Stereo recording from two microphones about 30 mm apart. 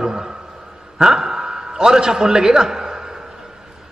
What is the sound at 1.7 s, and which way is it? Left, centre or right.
A man's voice, right.